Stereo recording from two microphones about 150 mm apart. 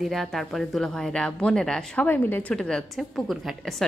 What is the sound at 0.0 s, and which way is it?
Speech, centre (ahead or behind).